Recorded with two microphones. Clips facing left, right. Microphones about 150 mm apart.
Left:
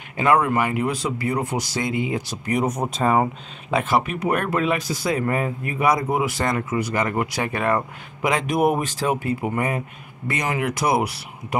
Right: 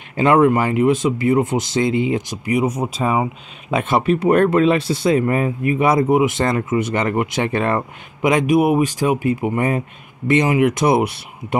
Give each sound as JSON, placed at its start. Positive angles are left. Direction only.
{"t": 0.2, "sound": "speech", "side_deg": -25}
{"t": 2.4, "sound": "speech", "side_deg": -10}
{"t": 3.7, "sound": "speech", "side_deg": -25}